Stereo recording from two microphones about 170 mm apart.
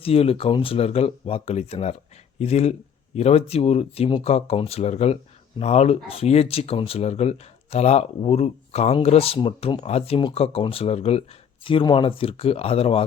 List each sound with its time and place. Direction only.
0.0 s speech: 35° left (ahead or behind)